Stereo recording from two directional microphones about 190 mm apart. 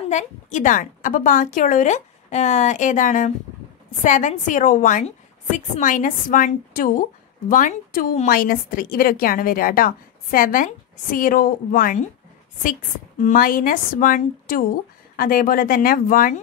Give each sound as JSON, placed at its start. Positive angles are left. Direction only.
{"t": 0.1, "sound": "a woman's voice", "side_deg": 40}
{"t": 13.2, "sound": "a woman's voice", "side_deg": 45}